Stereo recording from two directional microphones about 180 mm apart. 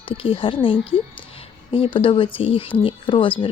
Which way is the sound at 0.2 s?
30° left (ahead or behind).